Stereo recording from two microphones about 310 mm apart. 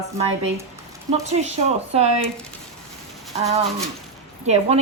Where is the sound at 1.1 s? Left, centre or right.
Right.